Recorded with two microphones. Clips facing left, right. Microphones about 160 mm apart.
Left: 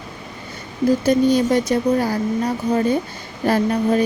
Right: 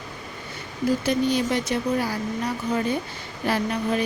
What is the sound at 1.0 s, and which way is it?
Speech, 45° left (ahead or behind).